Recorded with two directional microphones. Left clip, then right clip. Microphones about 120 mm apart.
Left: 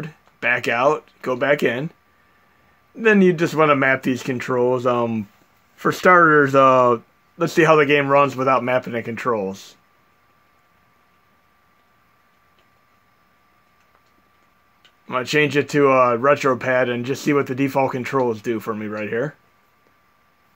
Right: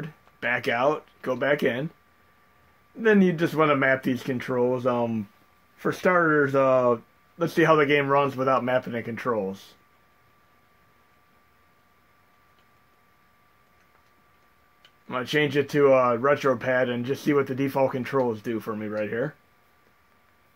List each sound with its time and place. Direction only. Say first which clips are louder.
0.0 s speech: left 7 dB; 55° left (ahead or behind)
3.0 s speech: left 6 dB; 55° left (ahead or behind); by 5.2 s 70° left (ahead or behind)
5.8 s speech: left 9 dB; 90° left; by 9.7 s 60° left (ahead or behind)
15.0 s speech: left 6 dB; 60° left (ahead or behind)